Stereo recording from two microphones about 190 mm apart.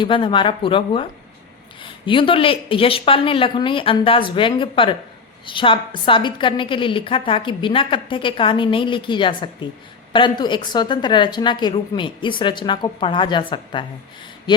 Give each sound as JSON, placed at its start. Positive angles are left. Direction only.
{"t": 0.0, "sound": "a woman's voice", "side_deg": 25}